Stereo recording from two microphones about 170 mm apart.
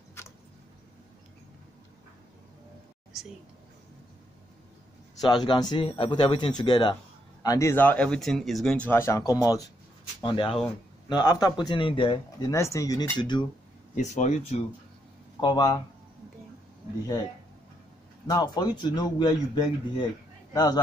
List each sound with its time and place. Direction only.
5.2 s speech: 25° left (ahead or behind)
7.4 s speech: 15° left (ahead or behind)
10.2 s speech: 30° left (ahead or behind)
13.9 s speech: 45° left (ahead or behind)
15.4 s speech: 25° left (ahead or behind)
18.2 s speech: 25° left (ahead or behind)